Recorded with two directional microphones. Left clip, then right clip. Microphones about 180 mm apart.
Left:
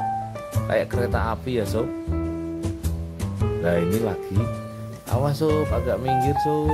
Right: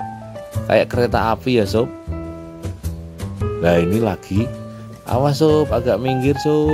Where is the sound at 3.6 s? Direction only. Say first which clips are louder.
Right 7 dB; 35° right (ahead or behind).